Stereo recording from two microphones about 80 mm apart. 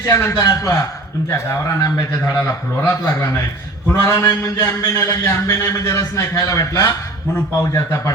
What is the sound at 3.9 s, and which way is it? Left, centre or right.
Mantra, left.